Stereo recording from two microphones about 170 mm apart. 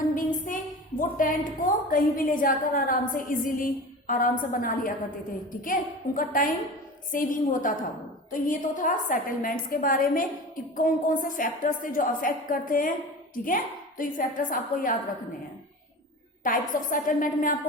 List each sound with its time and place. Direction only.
0.4 s a woman's voice: 50° left (ahead or behind)
16.4 s a woman's voice: 50° left (ahead or behind)